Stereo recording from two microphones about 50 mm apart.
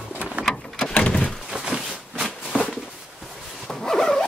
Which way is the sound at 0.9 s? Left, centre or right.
Left.